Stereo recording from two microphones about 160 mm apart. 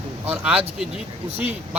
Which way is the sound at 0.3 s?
10° right (ahead or behind).